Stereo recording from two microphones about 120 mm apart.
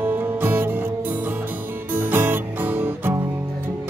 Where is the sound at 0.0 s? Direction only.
15° right (ahead or behind).